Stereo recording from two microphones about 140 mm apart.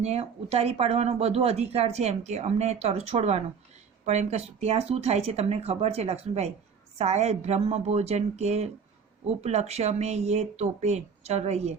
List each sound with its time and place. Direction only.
0.0 s speech: 50° right (ahead or behind)